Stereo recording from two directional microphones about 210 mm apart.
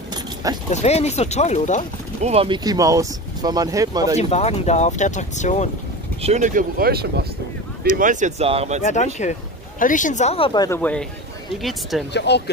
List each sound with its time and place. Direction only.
0.1 s keys jangling: 20° right (ahead or behind)
0.7 s speech: 30° left (ahead or behind)
2.2 s speech: 25° right (ahead or behind)
4.2 s speech: 30° left (ahead or behind)
6.2 s speech: 35° right (ahead or behind)
8.0 s speech: 35° right (ahead or behind)
8.8 s speech: 35° left (ahead or behind)
10.8 s speech: 5° left (ahead or behind)
12.1 s speech: 55° left (ahead or behind)